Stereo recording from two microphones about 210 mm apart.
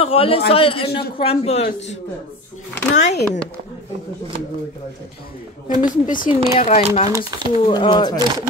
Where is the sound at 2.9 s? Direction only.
35° left (ahead or behind).